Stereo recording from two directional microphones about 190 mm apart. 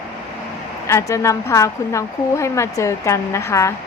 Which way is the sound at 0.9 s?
15° left (ahead or behind).